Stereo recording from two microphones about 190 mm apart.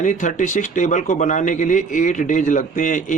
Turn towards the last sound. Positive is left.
turn(degrees=40)  # may be behind; listen again after turning